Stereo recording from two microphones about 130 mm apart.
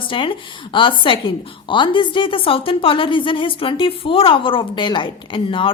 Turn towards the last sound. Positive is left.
turn(degrees=40)  # may be behind; listen again after turning